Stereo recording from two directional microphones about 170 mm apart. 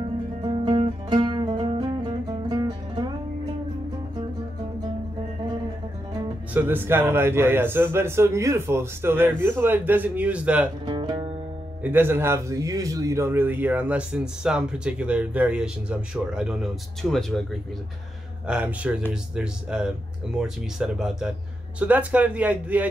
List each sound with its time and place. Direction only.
0.4 s music: 30° right (ahead or behind)
6.5 s a man's voice: 10° right (ahead or behind)
10.9 s music: 30° right (ahead or behind)
11.8 s a man's voice: 10° right (ahead or behind)
18.5 s a man's voice: 10° right (ahead or behind)